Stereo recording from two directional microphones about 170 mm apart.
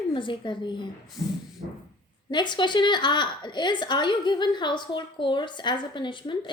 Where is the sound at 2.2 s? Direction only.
25° left (ahead or behind).